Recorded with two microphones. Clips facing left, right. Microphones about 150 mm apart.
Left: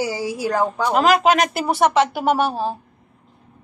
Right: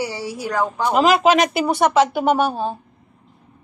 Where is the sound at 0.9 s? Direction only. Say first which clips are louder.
Right 1 dB; centre (ahead or behind).